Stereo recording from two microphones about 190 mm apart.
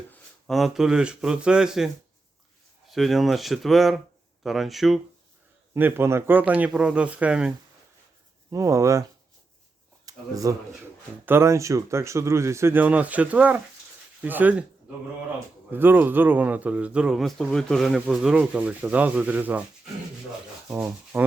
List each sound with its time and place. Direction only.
0.1 s speech: centre (ahead or behind)
2.9 s speech: centre (ahead or behind)
5.7 s speech: 10° right (ahead or behind)
8.4 s speech: 15° right (ahead or behind)
10.1 s speech: 20° right (ahead or behind)
15.7 s speech: 10° right (ahead or behind)
20.7 s rub: 10° right (ahead or behind)